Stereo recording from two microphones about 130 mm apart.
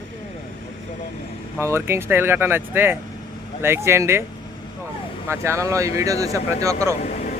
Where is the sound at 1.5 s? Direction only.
20° right (ahead or behind).